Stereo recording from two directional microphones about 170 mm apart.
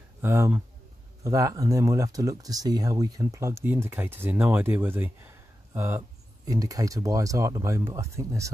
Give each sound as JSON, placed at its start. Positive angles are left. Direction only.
{"t": 0.2, "sound": "speech", "side_deg": -15}